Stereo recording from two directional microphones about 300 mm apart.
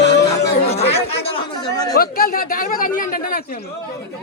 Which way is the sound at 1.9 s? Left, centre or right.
Left.